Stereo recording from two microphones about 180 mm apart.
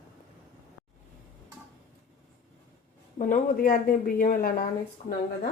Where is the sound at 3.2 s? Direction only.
45° left (ahead or behind).